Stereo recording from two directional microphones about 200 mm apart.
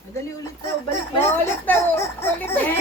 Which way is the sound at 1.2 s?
10° left (ahead or behind).